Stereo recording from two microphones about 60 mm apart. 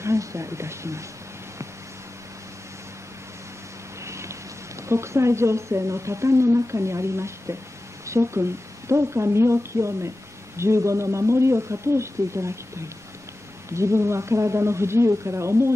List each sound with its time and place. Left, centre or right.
0.0 s a woman's voice: right
4.0 s vehicle: right
4.8 s a woman's voice: right